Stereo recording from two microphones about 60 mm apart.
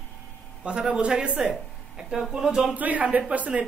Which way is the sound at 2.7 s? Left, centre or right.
Right.